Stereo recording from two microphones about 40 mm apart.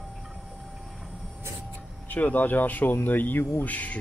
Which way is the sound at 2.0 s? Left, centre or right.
Left.